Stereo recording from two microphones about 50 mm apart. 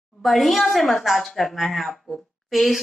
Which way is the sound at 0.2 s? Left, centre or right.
Centre.